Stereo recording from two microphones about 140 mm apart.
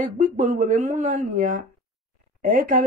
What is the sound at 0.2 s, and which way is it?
Speech, 65° right (ahead or behind).